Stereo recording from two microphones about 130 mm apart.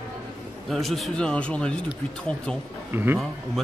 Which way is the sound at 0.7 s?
Centre (ahead or behind).